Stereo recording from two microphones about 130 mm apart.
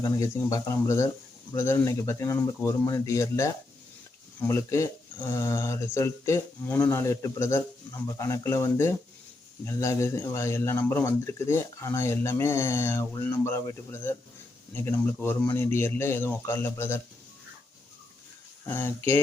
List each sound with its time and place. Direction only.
0.0 s speech: 25° left (ahead or behind)
18.7 s speech: 15° left (ahead or behind)